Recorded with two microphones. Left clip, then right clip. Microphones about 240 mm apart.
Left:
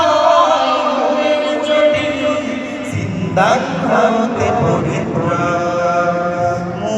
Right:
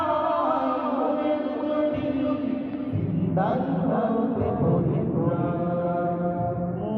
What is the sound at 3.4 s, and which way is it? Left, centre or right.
Chant, left.